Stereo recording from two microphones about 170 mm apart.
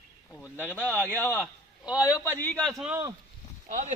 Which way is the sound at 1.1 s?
10° left (ahead or behind).